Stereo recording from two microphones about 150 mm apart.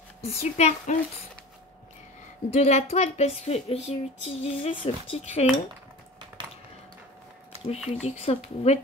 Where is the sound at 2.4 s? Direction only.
45° left (ahead or behind).